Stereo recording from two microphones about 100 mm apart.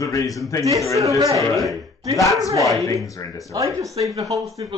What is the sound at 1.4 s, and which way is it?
Speech, centre (ahead or behind).